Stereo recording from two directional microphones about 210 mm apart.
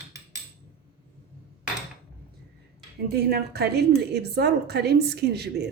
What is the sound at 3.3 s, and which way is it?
A woman's voice, 50° right (ahead or behind).